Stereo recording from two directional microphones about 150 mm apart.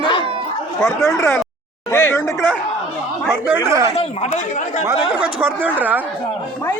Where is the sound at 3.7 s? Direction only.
20° right (ahead or behind).